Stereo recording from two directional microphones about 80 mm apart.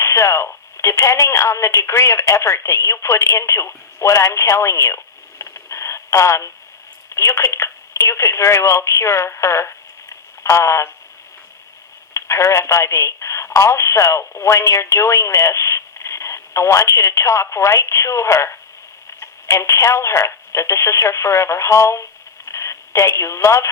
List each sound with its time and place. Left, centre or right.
0.0 s speech: left
12.1 s speech: left